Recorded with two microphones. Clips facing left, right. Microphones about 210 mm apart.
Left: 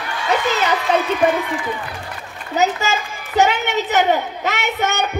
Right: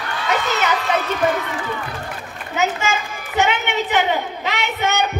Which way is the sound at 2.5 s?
35° left (ahead or behind).